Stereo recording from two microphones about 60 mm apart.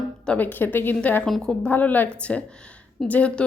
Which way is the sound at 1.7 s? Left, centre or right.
Left.